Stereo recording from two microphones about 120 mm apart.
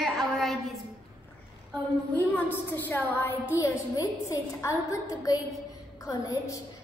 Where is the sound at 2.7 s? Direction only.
15° left (ahead or behind).